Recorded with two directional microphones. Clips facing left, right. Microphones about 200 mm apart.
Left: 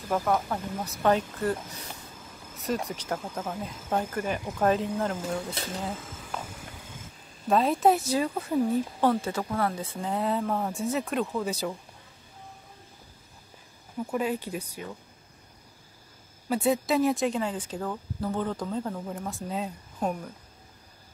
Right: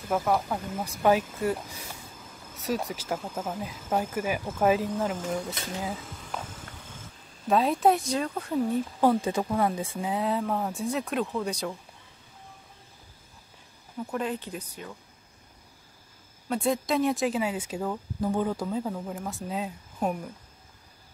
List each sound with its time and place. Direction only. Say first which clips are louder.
0.1 s speech: even; 5° right (ahead or behind)
7.4 s speech: even; centre (ahead or behind)
9.0 s speech: right 4 dB; 15° right (ahead or behind)
10.1 s speech: left 1 dB; centre (ahead or behind)
13.9 s speech: left 2 dB; 5° left (ahead or behind)
16.4 s speech: left 2 dB; 5° left (ahead or behind)